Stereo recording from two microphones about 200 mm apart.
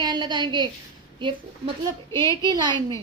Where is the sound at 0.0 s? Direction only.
20° right (ahead or behind).